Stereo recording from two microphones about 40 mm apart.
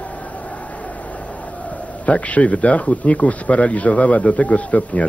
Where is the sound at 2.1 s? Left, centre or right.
Left.